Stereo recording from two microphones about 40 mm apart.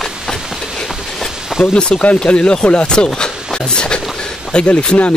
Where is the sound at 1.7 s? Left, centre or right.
Left.